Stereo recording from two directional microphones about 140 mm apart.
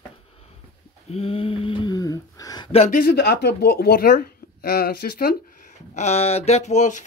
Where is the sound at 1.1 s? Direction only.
45° left (ahead or behind).